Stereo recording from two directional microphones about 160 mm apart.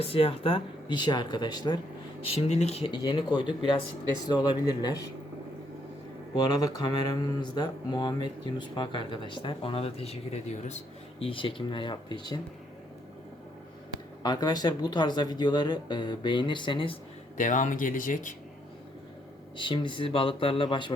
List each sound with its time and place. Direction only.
0.0 s speech: 35° left (ahead or behind)
2.2 s speech: 40° left (ahead or behind)
6.3 s speech: 25° left (ahead or behind)
14.2 s speech: 25° left (ahead or behind)
17.3 s speech: 55° left (ahead or behind)
19.5 s speech: 30° left (ahead or behind)